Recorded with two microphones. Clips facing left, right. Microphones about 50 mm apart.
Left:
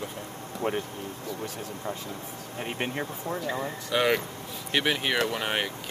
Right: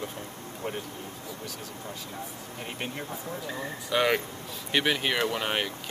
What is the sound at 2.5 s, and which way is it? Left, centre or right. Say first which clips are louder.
Speech: left 5 dB; left.